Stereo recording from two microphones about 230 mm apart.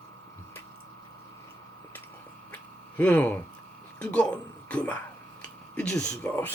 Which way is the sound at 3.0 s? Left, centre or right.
Centre.